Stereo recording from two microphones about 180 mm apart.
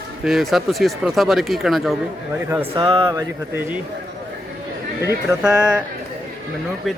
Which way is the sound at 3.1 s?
10° right (ahead or behind).